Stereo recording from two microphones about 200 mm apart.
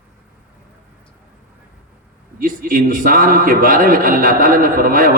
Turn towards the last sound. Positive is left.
turn(degrees=-45)  # may be behind; listen again after turning